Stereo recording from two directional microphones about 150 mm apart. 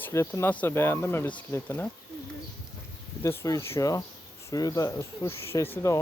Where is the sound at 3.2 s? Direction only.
20° left (ahead or behind).